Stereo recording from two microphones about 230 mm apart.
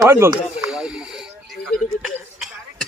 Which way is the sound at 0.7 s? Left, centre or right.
Centre.